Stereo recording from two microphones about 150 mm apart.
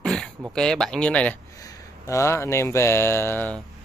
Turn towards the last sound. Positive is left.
turn(degrees=10)  # may be behind; listen again after turning